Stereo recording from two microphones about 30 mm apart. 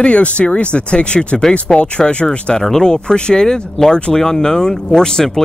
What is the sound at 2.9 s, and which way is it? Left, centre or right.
Speech, left.